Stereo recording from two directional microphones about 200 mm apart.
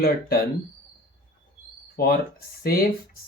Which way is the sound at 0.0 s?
50° left (ahead or behind).